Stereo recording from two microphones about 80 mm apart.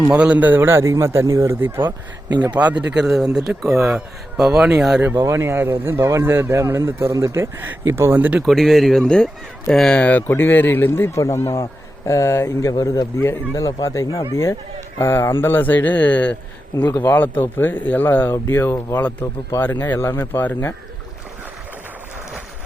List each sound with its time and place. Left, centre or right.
0.1 s speech: centre; by 1.8 s right
2.3 s speech: right
2.6 s speech: centre
3.0 s speech: centre
5.2 s speech: right
6.0 s speech: right
8.2 s speech: centre
8.4 s speech: centre
10.0 s speech: centre